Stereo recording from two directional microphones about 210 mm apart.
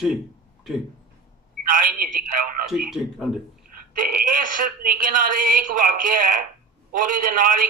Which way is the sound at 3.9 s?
40° right (ahead or behind).